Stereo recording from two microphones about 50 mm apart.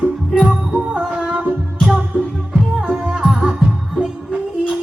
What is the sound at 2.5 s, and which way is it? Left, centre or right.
Music, centre.